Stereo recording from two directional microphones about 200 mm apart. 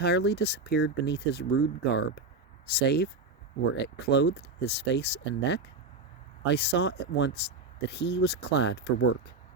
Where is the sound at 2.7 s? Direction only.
55° left (ahead or behind).